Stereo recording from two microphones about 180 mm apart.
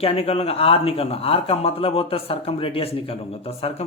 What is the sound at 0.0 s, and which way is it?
Speech, 35° left (ahead or behind).